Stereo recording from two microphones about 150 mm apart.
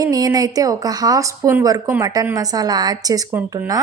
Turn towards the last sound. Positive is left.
turn(degrees=-25)  # may be behind; listen again after turning